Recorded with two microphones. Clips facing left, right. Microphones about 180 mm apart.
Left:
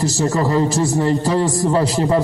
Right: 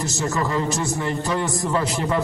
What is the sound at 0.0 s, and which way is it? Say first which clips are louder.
A man's voice: left 6 dB; 35° left (ahead or behind).